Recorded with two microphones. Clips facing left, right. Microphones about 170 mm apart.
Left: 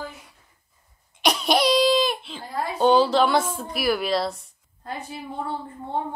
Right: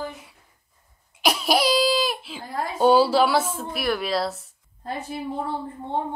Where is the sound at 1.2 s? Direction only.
5° right (ahead or behind).